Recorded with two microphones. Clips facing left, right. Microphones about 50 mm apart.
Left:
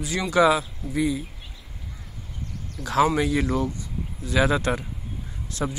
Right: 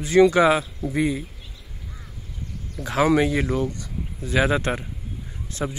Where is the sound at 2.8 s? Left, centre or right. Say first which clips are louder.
Right 2 dB; centre.